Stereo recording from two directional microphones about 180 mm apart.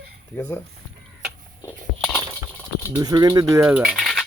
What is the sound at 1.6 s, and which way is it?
Biting, 5° left (ahead or behind).